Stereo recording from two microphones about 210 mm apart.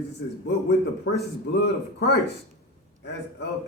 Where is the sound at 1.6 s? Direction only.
50° left (ahead or behind).